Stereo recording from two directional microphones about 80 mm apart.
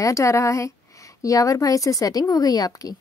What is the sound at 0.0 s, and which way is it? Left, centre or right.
A woman's voice, left.